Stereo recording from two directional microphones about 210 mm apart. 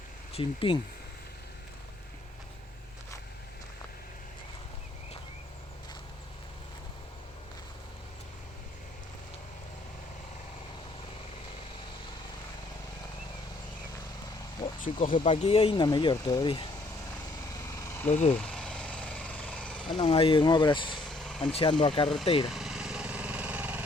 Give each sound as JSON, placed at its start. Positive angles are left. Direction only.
{"t": 0.3, "sound": "speech", "side_deg": 25}
{"t": 14.3, "sound": "a sound", "side_deg": 20}
{"t": 15.1, "sound": "speech", "side_deg": 25}
{"t": 17.6, "sound": "vehicle", "side_deg": 15}
{"t": 18.1, "sound": "speech", "side_deg": 35}
{"t": 18.3, "sound": "vehicle", "side_deg": 5}
{"t": 19.9, "sound": "speech", "side_deg": 25}
{"t": 21.1, "sound": "vehicle", "side_deg": 0}
{"t": 21.5, "sound": "speech", "side_deg": 25}
{"t": 22.4, "sound": "vehicle", "side_deg": 0}